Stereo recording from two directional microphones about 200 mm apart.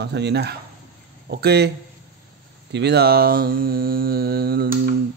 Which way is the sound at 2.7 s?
55° right (ahead or behind).